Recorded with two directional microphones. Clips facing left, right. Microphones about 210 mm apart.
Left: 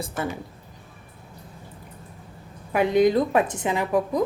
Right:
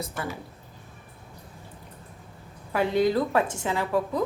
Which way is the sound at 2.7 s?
15° left (ahead or behind).